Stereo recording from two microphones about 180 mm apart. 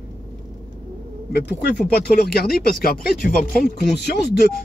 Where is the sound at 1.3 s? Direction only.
60° left (ahead or behind).